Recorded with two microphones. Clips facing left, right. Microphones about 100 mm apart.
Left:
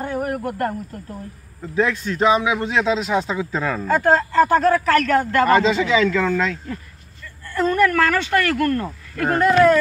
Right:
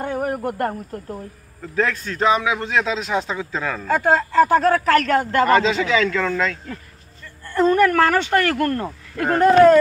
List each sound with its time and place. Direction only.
0.0 s a sound: 20° right (ahead or behind)
0.5 s speech: 25° right (ahead or behind)
1.6 s a man's voice: 15° left (ahead or behind)
3.8 s speech: 5° right (ahead or behind)
4.6 s speech: 20° right (ahead or behind)
5.5 s a man's voice: 10° left (ahead or behind)
7.4 s speech: 25° right (ahead or behind)